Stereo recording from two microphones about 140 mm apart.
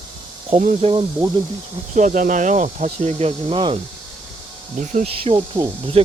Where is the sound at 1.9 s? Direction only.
65° right (ahead or behind).